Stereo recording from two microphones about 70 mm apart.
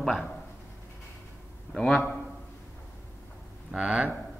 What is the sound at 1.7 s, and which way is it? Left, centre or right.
Speech, centre.